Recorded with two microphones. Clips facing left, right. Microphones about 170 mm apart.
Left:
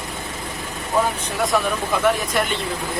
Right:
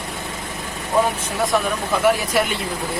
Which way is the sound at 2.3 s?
5° right (ahead or behind).